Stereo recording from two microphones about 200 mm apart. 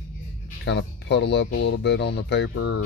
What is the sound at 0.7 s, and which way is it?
Speech, 60° left (ahead or behind).